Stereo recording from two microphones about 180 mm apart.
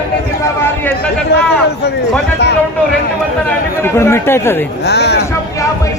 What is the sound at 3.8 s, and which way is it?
Speech, 15° left (ahead or behind).